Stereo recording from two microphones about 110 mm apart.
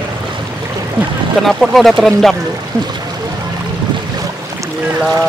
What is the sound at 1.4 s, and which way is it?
Speech, centre (ahead or behind).